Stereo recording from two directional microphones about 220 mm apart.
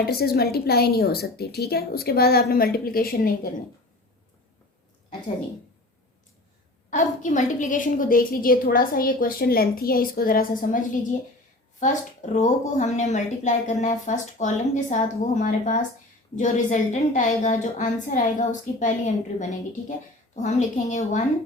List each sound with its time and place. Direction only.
0.1 s a woman's voice: 45° left (ahead or behind)
6.9 s a woman's voice: 35° left (ahead or behind)
11.8 s a woman's voice: 35° left (ahead or behind)